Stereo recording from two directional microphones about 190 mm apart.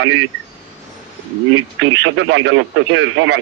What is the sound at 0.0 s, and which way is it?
Speech, 90° right.